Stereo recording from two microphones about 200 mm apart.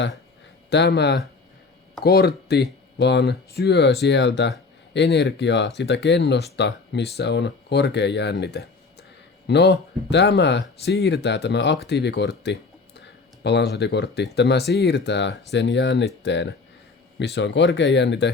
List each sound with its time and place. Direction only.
0.7 s speech: 60° left (ahead or behind)